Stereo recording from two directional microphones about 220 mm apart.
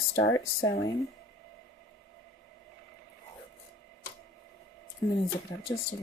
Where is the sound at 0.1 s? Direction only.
55° left (ahead or behind).